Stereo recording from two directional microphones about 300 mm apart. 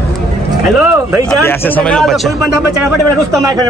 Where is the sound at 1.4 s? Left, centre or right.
Centre.